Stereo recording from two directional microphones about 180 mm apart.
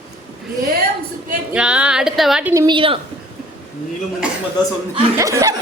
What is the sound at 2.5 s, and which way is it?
Speech, 20° right (ahead or behind).